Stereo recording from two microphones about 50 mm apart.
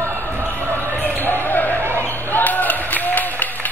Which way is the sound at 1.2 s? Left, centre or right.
Left.